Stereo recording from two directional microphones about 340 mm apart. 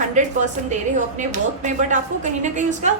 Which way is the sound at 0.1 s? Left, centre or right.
Right.